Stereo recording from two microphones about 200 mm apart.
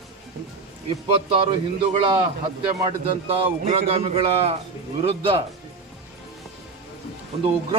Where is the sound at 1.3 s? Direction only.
25° right (ahead or behind).